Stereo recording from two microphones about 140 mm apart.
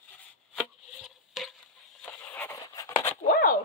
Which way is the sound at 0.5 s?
Centre (ahead or behind).